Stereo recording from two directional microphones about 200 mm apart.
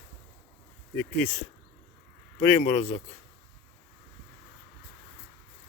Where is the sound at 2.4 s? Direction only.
40° left (ahead or behind).